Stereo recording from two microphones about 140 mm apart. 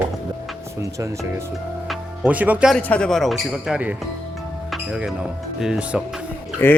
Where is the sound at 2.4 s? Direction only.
10° right (ahead or behind).